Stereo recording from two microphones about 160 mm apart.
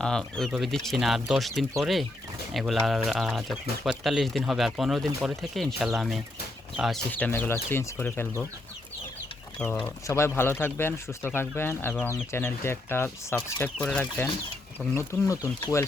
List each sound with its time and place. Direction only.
0.0 s speech: 5° left (ahead or behind)
7.1 s speech: 10° left (ahead or behind)
9.6 s speech: 10° left (ahead or behind)
14.8 s speech: 10° right (ahead or behind)
15.6 s speech: 15° left (ahead or behind)